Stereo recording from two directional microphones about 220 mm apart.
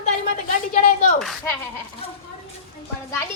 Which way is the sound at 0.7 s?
35° left (ahead or behind).